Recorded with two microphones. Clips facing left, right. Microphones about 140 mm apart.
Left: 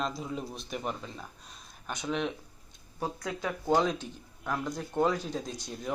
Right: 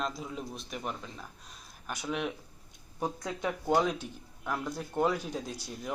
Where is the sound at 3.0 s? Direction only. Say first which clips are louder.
Even; 20° right (ahead or behind).